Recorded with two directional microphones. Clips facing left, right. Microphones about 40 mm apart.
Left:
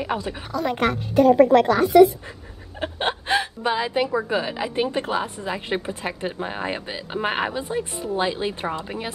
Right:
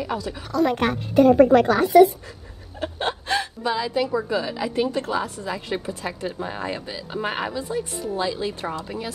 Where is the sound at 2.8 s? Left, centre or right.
Left.